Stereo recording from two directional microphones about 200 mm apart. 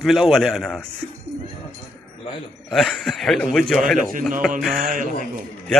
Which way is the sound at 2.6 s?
Centre (ahead or behind).